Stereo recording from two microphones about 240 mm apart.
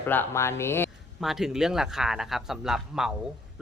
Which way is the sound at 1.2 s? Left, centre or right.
Centre.